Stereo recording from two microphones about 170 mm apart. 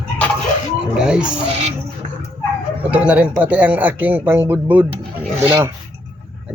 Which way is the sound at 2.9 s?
5° right (ahead or behind).